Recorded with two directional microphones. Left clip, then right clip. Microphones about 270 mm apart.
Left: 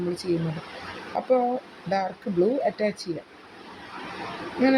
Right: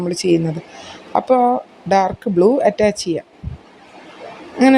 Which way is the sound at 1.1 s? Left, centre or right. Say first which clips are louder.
Right 9 dB; right.